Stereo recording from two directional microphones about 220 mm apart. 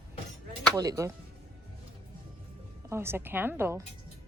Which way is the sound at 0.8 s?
15° right (ahead or behind).